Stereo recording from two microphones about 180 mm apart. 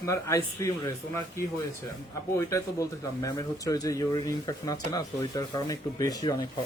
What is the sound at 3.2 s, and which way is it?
Speech, 20° left (ahead or behind).